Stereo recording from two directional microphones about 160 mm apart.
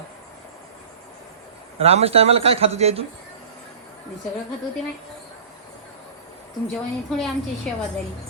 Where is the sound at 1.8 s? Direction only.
40° right (ahead or behind).